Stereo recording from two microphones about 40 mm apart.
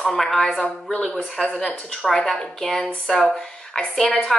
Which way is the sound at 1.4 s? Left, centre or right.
Centre.